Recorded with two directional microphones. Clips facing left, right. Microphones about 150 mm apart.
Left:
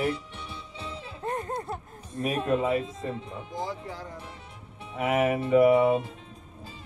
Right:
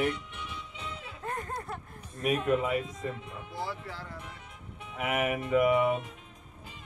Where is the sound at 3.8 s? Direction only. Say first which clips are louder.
Left 3 dB; 15° left (ahead or behind).